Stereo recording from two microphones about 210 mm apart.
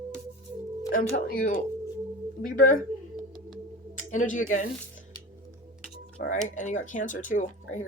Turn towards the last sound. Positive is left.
turn(degrees=40)  # may be behind; listen again after turning